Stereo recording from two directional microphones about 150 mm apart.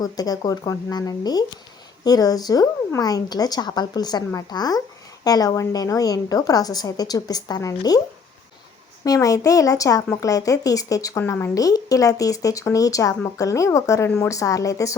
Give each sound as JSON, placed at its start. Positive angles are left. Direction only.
{"t": 0.0, "sound": "a woman's voice", "side_deg": 25}
{"t": 9.0, "sound": "a woman's voice", "side_deg": 25}